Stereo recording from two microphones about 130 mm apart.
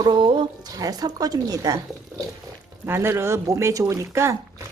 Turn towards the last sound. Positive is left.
turn(degrees=-20)  # may be behind; listen again after turning